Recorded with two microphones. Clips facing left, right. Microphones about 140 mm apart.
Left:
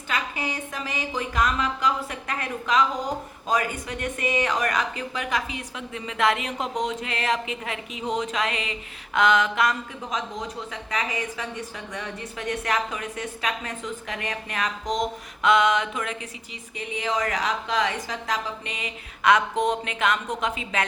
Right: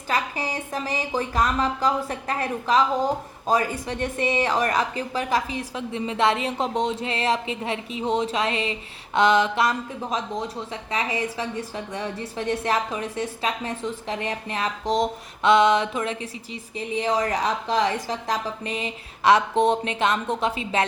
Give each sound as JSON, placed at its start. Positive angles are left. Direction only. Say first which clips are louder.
{"t": 0.1, "sound": "a woman's voice", "louder": "right 3 dB", "side_deg": -35}